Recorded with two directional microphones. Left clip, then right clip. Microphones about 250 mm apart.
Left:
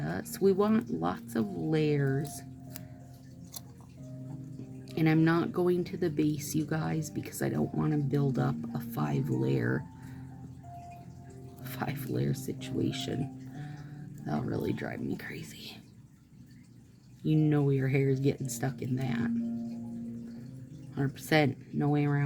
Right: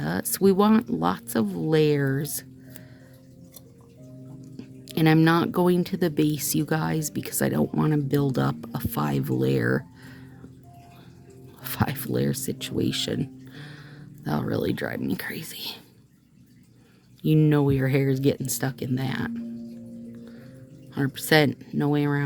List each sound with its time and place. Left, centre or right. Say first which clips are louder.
0.0 s speech: right 6 dB; right
4.9 s speech: right 7 dB; right
11.6 s speech: right 8 dB; right
17.2 s speech: right 7 dB; right
20.9 s speech: right 7 dB; right